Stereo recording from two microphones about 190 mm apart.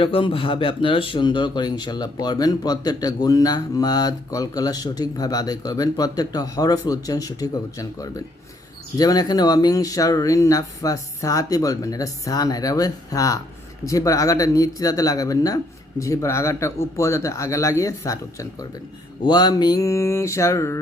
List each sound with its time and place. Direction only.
0.0 s speech: 30° left (ahead or behind)